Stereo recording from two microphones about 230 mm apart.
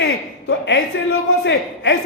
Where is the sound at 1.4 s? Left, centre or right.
Left.